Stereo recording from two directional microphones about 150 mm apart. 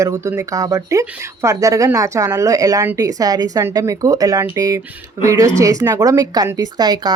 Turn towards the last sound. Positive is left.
turn(degrees=-30)  # may be behind; listen again after turning